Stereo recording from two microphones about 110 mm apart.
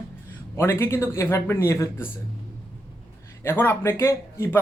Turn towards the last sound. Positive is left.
turn(degrees=20)  # may be behind; listen again after turning